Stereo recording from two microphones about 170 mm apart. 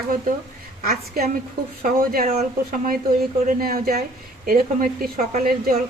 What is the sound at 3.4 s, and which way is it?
A woman's voice, 60° right (ahead or behind).